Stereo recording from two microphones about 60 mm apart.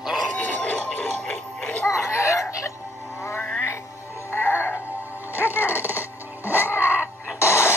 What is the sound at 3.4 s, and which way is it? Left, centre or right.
Music, left.